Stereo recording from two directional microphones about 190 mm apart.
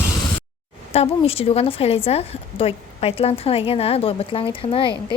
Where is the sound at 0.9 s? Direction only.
30° left (ahead or behind).